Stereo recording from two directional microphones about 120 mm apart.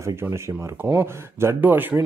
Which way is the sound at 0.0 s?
20° right (ahead or behind).